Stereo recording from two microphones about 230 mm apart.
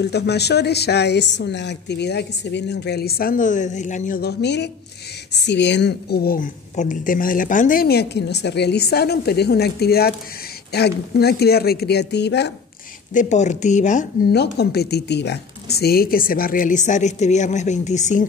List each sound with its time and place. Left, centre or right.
0.0 s a woman's voice: left
13.1 s speech: left
14.3 s speech: left